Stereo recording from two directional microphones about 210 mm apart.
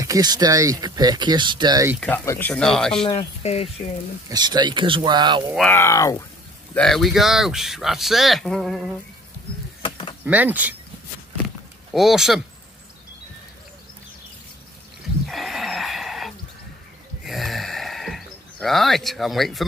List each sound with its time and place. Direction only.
0.0 s speech: 15° right (ahead or behind)
2.0 s speech: 10° left (ahead or behind)
3.1 s speech: 25° left (ahead or behind)
4.3 s speech: 20° right (ahead or behind)
5.7 s speech: 10° left (ahead or behind)
6.7 s speech: centre (ahead or behind)
9.8 s a sound: 25° left (ahead or behind)
10.2 s speech: 10° right (ahead or behind)
11.9 s speech: centre (ahead or behind)
15.2 s a sound: centre (ahead or behind)